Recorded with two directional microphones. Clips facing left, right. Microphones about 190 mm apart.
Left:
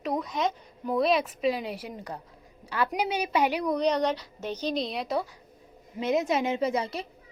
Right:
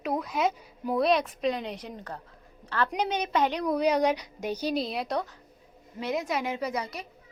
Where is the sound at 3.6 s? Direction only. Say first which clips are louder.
Right 1 dB; 5° right (ahead or behind).